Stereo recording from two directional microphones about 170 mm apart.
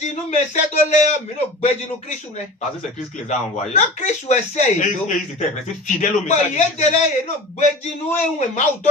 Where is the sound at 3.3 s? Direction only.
45° left (ahead or behind).